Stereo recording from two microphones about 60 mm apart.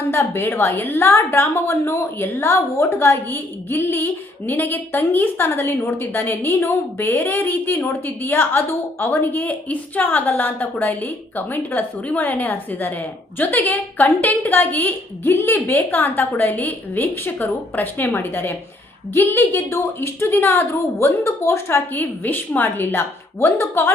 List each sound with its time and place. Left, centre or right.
0.1 s a woman's voice: left